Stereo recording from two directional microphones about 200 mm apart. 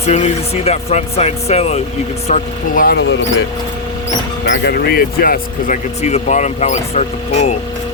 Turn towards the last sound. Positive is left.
turn(degrees=35)  # may be behind; listen again after turning